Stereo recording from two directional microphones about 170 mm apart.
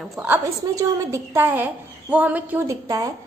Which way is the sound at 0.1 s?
10° right (ahead or behind).